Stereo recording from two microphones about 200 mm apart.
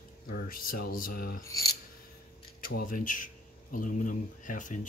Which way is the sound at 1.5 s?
50° left (ahead or behind).